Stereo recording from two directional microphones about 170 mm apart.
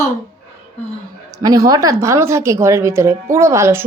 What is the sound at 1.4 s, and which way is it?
Speech, 20° right (ahead or behind).